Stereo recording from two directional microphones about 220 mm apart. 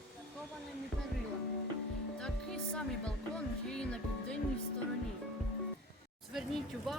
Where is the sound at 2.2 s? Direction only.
5° left (ahead or behind).